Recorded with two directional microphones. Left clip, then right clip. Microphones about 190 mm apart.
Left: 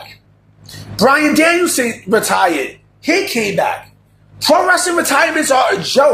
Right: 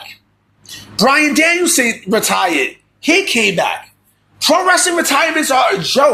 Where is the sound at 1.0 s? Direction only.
30° right (ahead or behind).